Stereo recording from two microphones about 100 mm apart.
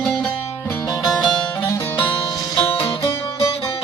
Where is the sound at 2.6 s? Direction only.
70° left (ahead or behind).